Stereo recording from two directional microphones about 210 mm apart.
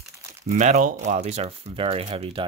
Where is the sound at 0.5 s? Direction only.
35° right (ahead or behind).